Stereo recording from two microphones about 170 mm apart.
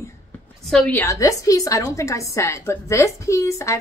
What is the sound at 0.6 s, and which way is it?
A woman's voice, 5° left (ahead or behind).